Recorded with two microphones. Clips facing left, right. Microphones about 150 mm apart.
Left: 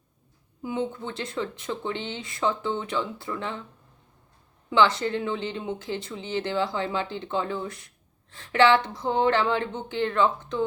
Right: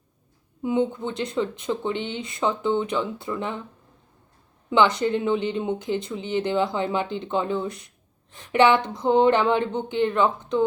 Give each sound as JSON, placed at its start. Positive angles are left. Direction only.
{"t": 0.6, "sound": "speech", "side_deg": -20}
{"t": 4.7, "sound": "speech", "side_deg": -20}